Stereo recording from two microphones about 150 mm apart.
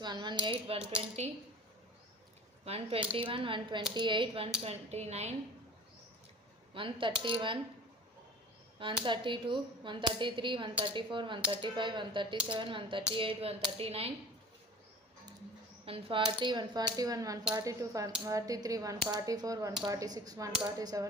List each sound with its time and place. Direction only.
0.0 s speech: 30° right (ahead or behind); by 1.3 s 45° right (ahead or behind)
2.6 s speech: 40° right (ahead or behind)
6.7 s speech: 35° right (ahead or behind)
9.0 s speech: 35° right (ahead or behind)
15.9 s speech: 35° right (ahead or behind)